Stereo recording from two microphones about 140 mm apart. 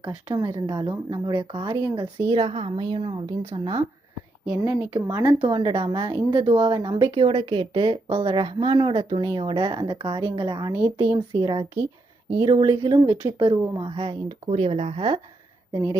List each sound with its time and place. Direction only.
0.3 s speech: 30° right (ahead or behind)
4.4 s speech: 15° right (ahead or behind)
5.4 s speech: 35° right (ahead or behind)
15.7 s a woman's voice: 25° right (ahead or behind)